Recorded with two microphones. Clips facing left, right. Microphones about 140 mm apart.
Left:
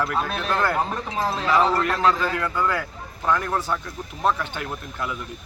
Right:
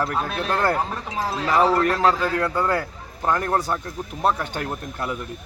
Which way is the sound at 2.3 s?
35° right (ahead or behind).